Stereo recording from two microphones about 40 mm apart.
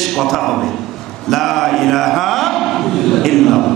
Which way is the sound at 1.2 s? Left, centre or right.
Centre.